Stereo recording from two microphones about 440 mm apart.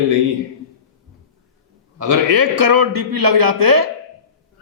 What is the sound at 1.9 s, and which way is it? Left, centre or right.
A man's voice, right.